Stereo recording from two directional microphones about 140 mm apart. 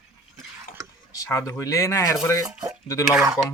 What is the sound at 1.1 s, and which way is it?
A man's voice, 25° left (ahead or behind).